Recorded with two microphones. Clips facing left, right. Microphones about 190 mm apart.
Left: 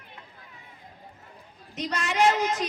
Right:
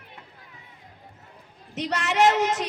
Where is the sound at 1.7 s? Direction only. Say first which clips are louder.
Right 3 dB; 75° right (ahead or behind).